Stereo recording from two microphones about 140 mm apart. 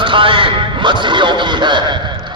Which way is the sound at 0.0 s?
35° right (ahead or behind).